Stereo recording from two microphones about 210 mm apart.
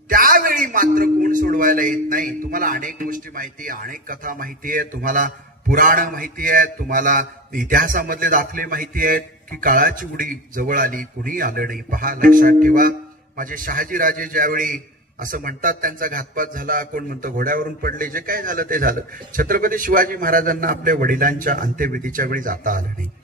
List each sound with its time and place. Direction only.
0.1 s a man's voice: 45° right (ahead or behind)